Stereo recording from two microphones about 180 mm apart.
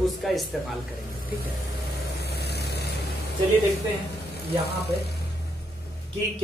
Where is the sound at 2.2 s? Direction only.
65° left (ahead or behind).